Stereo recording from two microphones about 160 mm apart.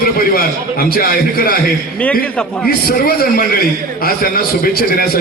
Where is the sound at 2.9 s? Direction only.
65° left (ahead or behind).